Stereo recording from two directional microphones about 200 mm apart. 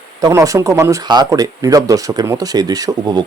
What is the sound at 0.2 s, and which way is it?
Speech, 15° right (ahead or behind).